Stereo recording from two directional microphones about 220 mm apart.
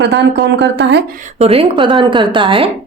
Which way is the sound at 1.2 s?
30° right (ahead or behind).